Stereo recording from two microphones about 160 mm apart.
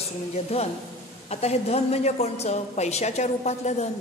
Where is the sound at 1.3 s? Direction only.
40° left (ahead or behind).